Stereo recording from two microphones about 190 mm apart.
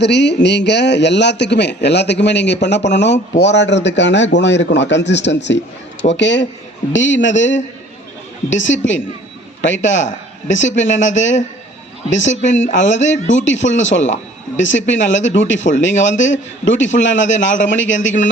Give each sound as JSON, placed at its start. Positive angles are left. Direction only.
{"t": 0.0, "sound": "a man's voice", "side_deg": 65}